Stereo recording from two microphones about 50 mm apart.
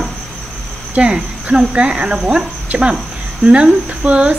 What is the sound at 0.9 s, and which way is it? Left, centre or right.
Speech, right.